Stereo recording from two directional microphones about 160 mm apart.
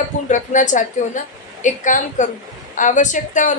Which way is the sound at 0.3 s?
50° left (ahead or behind).